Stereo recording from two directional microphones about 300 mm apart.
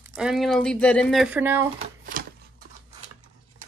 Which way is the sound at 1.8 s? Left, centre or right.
Right.